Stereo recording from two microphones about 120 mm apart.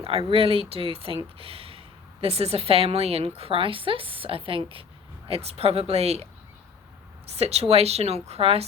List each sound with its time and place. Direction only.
0.0 s a woman's voice: 50° right (ahead or behind)
7.3 s a woman's voice: 60° right (ahead or behind)